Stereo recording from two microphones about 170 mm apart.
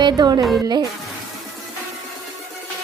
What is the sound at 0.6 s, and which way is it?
Music, 25° right (ahead or behind).